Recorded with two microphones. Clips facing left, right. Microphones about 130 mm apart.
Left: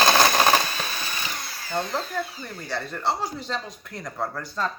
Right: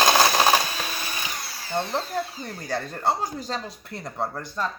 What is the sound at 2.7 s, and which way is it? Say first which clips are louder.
Speech: right 2 dB; 45° right (ahead or behind).